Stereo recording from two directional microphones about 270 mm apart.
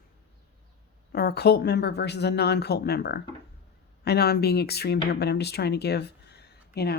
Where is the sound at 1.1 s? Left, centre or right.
Left.